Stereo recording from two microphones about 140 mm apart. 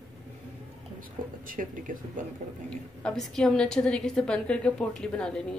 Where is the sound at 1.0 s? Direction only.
75° right (ahead or behind).